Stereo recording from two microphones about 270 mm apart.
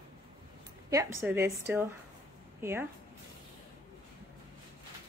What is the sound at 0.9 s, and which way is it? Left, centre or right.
Speech, centre.